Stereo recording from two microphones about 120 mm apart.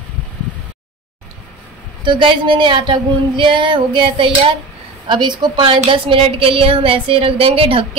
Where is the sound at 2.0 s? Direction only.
45° right (ahead or behind).